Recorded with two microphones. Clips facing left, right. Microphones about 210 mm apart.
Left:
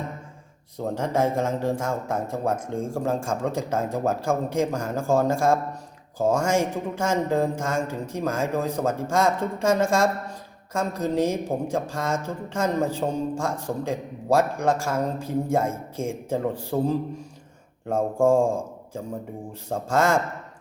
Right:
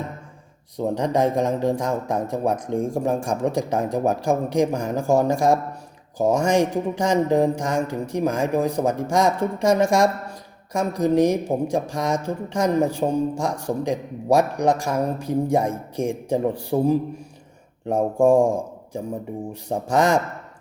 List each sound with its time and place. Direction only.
0.8 s a woman's voice: 15° right (ahead or behind)